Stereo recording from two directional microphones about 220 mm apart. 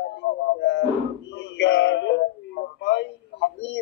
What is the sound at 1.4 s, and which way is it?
Male singing, 50° left (ahead or behind).